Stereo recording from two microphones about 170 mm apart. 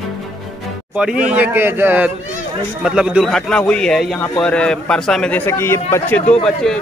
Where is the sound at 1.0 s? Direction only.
5° right (ahead or behind).